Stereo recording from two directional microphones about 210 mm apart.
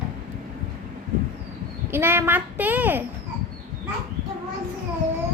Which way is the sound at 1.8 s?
10° right (ahead or behind).